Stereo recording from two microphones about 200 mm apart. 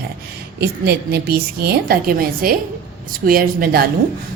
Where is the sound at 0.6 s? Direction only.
55° right (ahead or behind).